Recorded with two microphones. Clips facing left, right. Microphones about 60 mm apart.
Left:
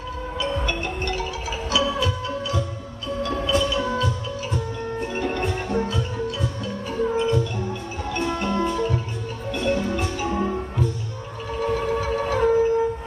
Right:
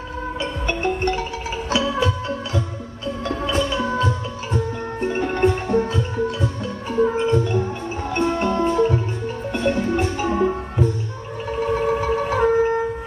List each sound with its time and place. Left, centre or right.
0.3 s music: right
11.7 s wind instrument: right